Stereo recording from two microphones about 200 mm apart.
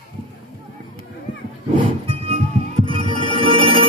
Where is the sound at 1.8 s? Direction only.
30° right (ahead or behind).